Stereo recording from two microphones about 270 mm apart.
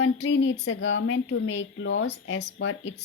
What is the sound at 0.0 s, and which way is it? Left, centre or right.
A woman's voice, left.